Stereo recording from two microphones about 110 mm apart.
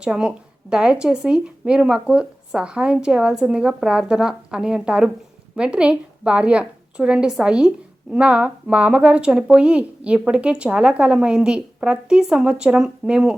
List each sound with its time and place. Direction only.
0.0 s speech: 5° right (ahead or behind)